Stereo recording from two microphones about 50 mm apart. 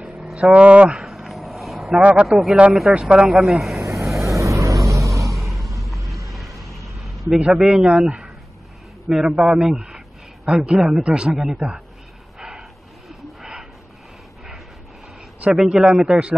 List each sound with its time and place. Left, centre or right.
0.2 s speech: right
1.0 s vehicle: centre
1.9 s speech: right
2.2 s speech: centre
2.9 s speech: right
3.3 s speech: centre
3.9 s vehicle: centre
4.2 s vehicle: right
5.2 s vehicle: centre
7.5 s speech: centre
9.1 s a man's voice: centre
12.4 s vehicle: centre
15.5 s speech: centre